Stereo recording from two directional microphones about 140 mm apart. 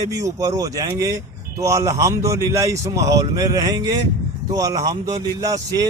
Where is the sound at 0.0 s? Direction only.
25° right (ahead or behind).